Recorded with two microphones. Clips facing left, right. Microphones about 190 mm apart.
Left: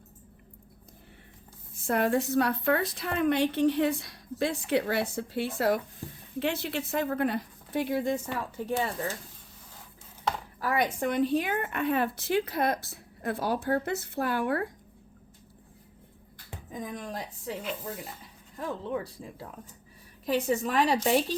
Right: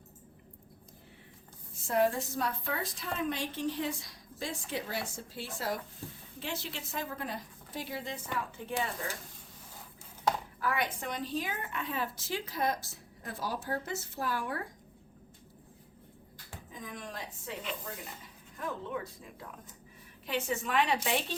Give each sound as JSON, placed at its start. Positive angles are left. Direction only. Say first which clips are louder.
{"t": 1.9, "sound": "a woman's voice", "louder": "left 4 dB", "side_deg": 65}
{"t": 10.6, "sound": "a woman's voice", "louder": "left 6 dB", "side_deg": 45}
{"t": 16.7, "sound": "a woman's voice", "louder": "left 7 dB", "side_deg": 45}
{"t": 18.5, "sound": "a woman's voice", "louder": "left 5 dB", "side_deg": 35}